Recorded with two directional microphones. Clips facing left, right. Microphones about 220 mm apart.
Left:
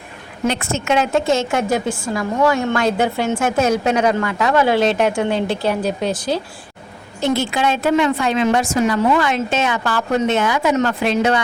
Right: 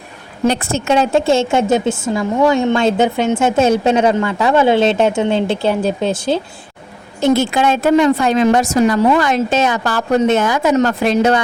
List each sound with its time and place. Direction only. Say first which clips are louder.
0.4 s a woman's voice: right 4 dB; 35° right (ahead or behind)
7.2 s a woman's voice: right 5 dB; 45° right (ahead or behind)